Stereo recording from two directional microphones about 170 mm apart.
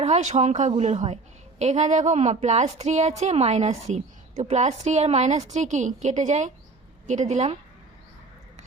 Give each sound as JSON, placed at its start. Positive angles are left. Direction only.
{"t": 0.0, "sound": "a woman's voice", "side_deg": -45}